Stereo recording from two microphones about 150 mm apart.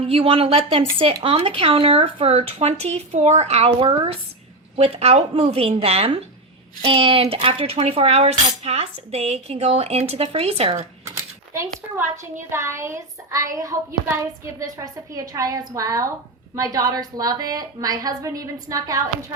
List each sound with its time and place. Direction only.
0.1 s speech: 40° right (ahead or behind)
11.5 s a woman's voice: 20° right (ahead or behind)